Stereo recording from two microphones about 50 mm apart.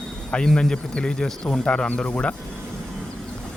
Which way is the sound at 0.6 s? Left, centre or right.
Centre.